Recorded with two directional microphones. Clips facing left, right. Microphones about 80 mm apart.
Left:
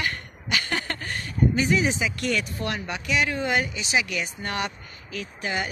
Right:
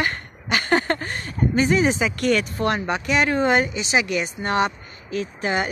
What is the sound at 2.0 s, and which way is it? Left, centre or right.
Speech, right.